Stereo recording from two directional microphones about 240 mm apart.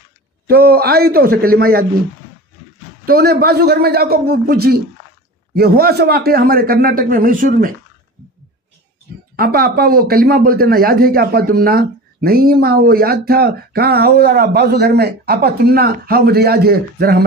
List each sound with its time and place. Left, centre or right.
0.5 s speech: right
3.1 s speech: right
9.4 s speech: right